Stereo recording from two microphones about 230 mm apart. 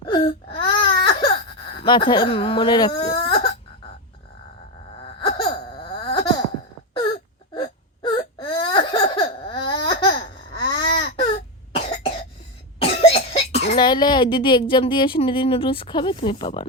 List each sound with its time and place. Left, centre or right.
0.0 s baby cry: left
1.7 s speech: left
3.2 s throat clearing: centre
5.9 s a sound: left
6.9 s wail: left
8.4 s baby cry: centre
11.8 s cough: left
12.8 s speech: left